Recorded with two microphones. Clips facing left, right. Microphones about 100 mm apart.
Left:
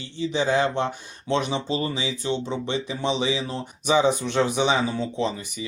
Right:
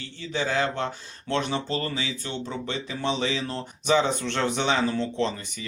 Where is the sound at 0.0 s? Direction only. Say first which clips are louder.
Left 5 dB; 20° left (ahead or behind).